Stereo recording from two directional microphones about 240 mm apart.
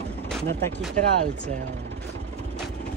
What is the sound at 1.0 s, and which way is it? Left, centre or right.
Speech, right.